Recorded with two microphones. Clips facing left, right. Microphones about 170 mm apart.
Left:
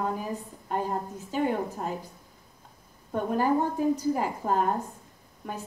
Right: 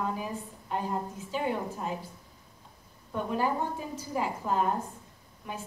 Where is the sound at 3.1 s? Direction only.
45° left (ahead or behind).